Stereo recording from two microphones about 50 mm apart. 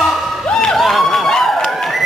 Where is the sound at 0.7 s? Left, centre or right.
Centre.